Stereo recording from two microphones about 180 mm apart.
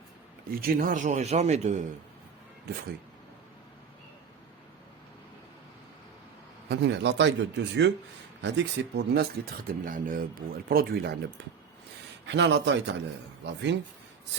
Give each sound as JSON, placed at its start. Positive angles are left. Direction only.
{"t": 0.5, "sound": "a man's voice", "side_deg": -55}
{"t": 6.7, "sound": "speech", "side_deg": -75}
{"t": 9.6, "sound": "speech", "side_deg": -50}
{"t": 12.2, "sound": "speech", "side_deg": -80}